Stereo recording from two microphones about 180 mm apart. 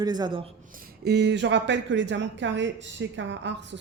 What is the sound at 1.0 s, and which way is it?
A woman's voice, 65° right (ahead or behind).